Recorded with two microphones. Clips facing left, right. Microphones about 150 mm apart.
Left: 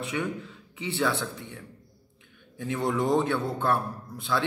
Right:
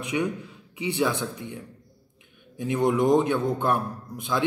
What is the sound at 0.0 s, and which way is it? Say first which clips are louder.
A man's voice: right 4 dB; 15° right (ahead or behind).